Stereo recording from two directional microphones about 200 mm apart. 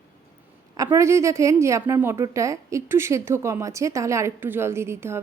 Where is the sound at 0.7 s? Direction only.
15° right (ahead or behind).